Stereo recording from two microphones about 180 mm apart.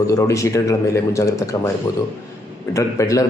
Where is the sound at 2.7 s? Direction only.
20° left (ahead or behind).